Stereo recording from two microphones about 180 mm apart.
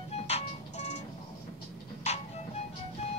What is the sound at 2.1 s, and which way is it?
Music, 40° left (ahead or behind).